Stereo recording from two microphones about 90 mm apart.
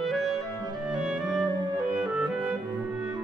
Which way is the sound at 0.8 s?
10° right (ahead or behind).